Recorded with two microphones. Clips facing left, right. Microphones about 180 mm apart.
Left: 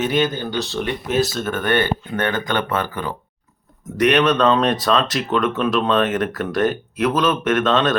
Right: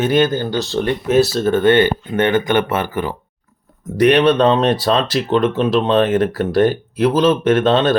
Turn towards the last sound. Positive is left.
turn(degrees=-30)  # may be behind; listen again after turning